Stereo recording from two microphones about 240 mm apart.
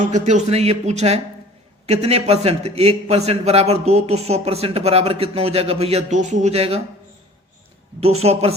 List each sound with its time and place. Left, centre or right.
0.1 s a man's voice: right
8.0 s a man's voice: right